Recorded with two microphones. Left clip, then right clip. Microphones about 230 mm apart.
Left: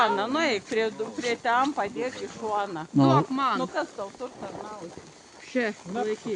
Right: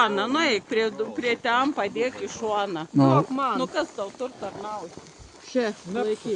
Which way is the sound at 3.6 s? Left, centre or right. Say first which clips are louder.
Right 3 dB; right.